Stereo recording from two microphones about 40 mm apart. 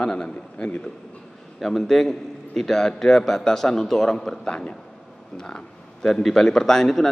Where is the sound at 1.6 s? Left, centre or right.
Centre.